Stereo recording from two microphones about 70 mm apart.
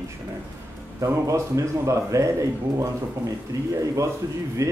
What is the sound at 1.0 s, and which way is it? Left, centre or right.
Speech, right.